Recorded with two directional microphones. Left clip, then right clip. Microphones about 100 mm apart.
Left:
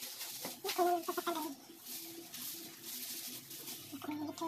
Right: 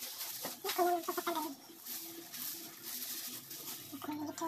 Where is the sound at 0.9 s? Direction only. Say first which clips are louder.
Even; 5° left (ahead or behind).